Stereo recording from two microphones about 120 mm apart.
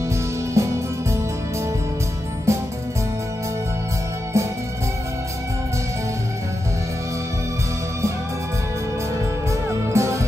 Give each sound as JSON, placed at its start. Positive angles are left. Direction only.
{"t": 0.6, "sound": "music", "side_deg": -25}
{"t": 2.5, "sound": "music", "side_deg": -25}
{"t": 9.5, "sound": "music", "side_deg": -25}